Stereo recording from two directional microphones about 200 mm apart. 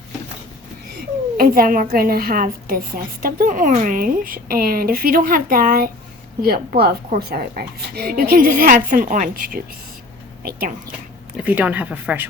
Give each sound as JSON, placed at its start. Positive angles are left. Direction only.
{"t": 1.4, "sound": "a woman's voice", "side_deg": -45}
{"t": 11.3, "sound": "speech", "side_deg": -5}